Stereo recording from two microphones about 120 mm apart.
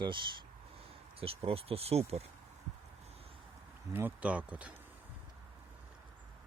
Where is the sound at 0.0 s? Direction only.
40° right (ahead or behind).